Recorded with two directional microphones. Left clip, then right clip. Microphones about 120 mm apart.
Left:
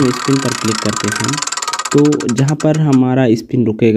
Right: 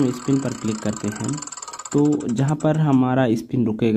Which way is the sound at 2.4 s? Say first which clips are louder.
Left 5 dB; 30° left (ahead or behind).